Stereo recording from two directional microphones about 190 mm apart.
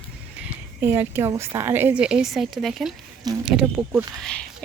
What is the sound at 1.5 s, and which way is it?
Speech, 15° right (ahead or behind).